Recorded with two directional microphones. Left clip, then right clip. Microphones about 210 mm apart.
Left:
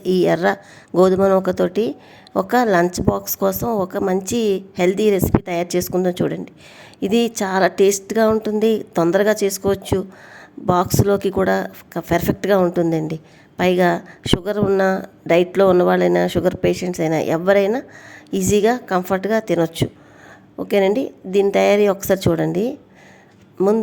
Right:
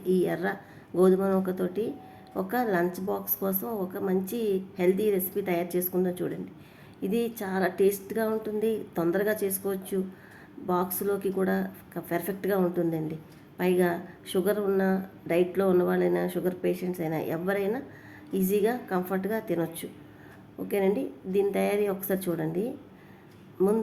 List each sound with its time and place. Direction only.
0.0 s speech: 50° left (ahead or behind)